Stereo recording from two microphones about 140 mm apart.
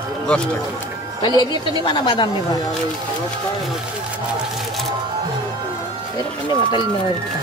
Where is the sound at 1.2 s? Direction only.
35° left (ahead or behind).